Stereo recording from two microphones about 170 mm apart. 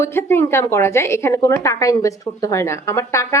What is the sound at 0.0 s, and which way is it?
A woman's voice, 15° left (ahead or behind).